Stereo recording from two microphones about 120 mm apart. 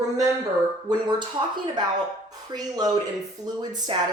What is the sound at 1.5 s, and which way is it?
Speech, 40° right (ahead or behind).